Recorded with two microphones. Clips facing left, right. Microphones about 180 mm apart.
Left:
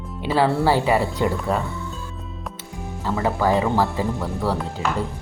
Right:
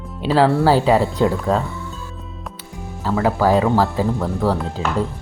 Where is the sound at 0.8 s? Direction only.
15° left (ahead or behind).